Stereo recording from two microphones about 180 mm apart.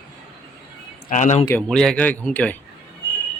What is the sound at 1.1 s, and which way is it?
Speech, 40° left (ahead or behind).